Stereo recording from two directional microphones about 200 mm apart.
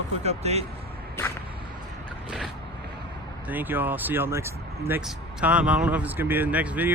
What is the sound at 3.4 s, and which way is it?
Speech, 10° right (ahead or behind).